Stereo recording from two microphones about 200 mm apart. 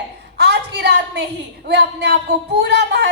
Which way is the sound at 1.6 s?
55° right (ahead or behind).